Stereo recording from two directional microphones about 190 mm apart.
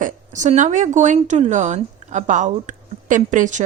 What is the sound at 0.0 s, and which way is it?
Speech, 40° right (ahead or behind).